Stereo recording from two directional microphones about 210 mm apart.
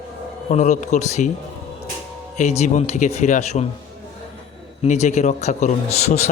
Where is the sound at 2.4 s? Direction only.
35° left (ahead or behind).